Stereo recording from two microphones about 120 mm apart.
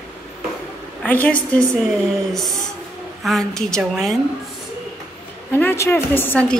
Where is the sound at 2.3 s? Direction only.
Centre (ahead or behind).